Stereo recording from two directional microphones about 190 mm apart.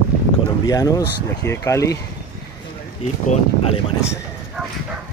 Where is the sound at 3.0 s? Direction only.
35° left (ahead or behind).